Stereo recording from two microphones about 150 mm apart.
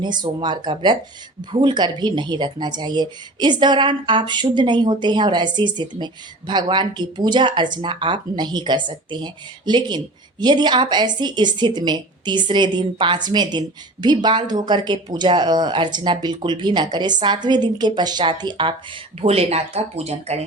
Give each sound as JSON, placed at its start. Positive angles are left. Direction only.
{"t": 0.0, "sound": "speech", "side_deg": -30}
{"t": 19.2, "sound": "speech", "side_deg": -40}